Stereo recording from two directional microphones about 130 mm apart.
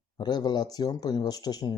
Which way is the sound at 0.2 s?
35° left (ahead or behind).